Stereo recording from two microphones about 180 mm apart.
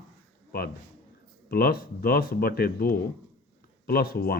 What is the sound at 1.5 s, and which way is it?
Speech, 55° left (ahead or behind).